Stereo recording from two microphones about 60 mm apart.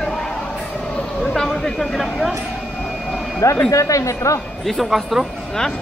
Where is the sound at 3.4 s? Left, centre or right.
Left.